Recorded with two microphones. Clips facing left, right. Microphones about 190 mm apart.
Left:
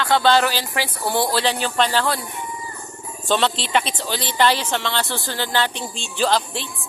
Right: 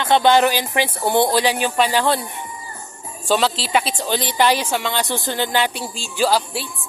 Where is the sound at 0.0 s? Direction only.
20° right (ahead or behind).